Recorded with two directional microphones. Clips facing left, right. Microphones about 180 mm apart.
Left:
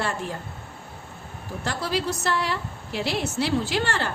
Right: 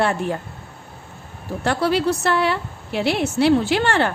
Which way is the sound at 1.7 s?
60° right (ahead or behind).